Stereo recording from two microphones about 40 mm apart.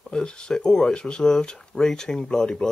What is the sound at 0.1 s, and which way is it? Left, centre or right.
Speech, left.